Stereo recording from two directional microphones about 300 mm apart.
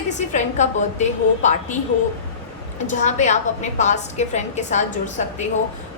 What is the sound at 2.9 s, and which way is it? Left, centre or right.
A woman's voice, left.